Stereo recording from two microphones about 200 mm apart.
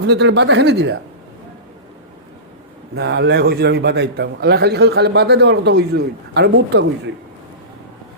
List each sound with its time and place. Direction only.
0.1 s a man's voice: 60° right (ahead or behind)
2.9 s a man's voice: 60° right (ahead or behind)